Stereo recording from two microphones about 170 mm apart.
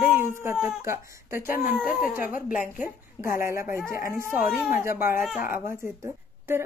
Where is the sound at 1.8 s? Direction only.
5° right (ahead or behind).